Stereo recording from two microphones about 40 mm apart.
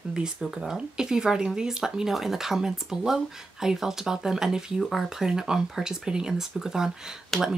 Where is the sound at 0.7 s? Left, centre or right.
Centre.